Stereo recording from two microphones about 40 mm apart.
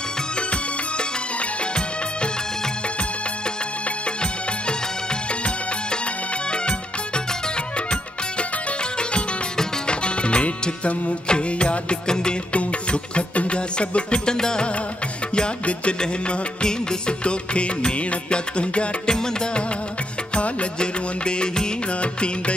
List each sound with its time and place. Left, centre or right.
9.8 s music: left
12.5 s music: left
20.3 s music: left